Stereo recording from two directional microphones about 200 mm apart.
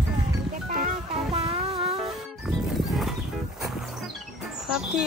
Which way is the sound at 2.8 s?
Centre (ahead or behind).